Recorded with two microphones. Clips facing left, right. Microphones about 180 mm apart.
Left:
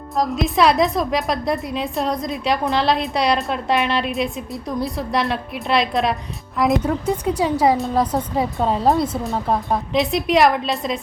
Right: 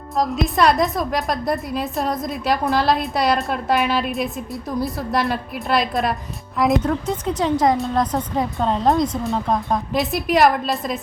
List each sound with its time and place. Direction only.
0.2 s a woman's voice: centre (ahead or behind)
7.1 s a woman's voice: 10° left (ahead or behind)